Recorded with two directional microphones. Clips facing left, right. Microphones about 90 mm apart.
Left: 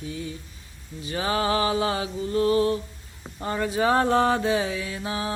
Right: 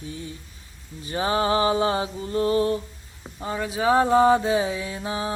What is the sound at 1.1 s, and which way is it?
Mantra, 30° right (ahead or behind).